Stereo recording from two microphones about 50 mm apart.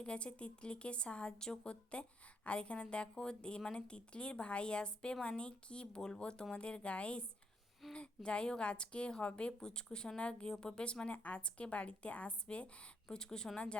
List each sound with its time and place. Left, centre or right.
0.0 s speech: left